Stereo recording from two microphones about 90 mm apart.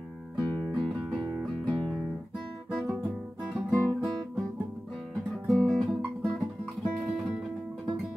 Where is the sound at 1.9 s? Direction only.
5° left (ahead or behind).